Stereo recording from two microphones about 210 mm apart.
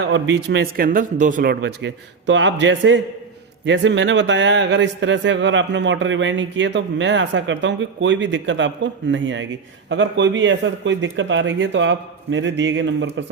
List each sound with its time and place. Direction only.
0.1 s a man's voice: 60° right (ahead or behind)